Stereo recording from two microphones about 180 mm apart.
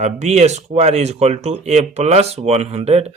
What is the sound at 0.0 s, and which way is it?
Speech, 40° right (ahead or behind).